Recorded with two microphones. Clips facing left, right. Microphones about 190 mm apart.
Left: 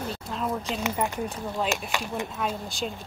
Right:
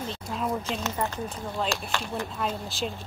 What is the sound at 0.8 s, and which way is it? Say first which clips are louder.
Speech: left 2 dB; 15° left (ahead or behind).